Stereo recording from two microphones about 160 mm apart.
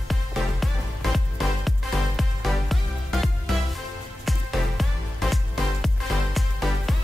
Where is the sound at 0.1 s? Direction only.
Centre (ahead or behind).